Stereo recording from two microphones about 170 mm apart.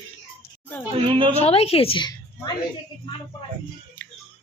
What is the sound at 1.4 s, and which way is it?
A woman's voice, 35° left (ahead or behind).